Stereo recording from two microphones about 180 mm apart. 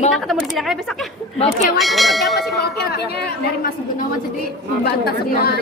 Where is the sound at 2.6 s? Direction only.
60° left (ahead or behind).